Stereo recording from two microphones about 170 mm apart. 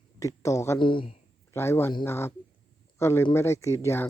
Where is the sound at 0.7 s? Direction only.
30° left (ahead or behind).